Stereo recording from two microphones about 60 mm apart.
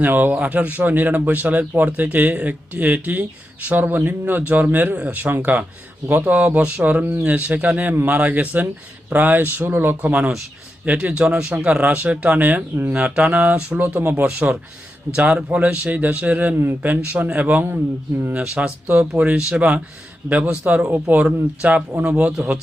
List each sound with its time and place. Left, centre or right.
0.0 s a man's voice: right
10.0 s speech: right
14.3 s speech: centre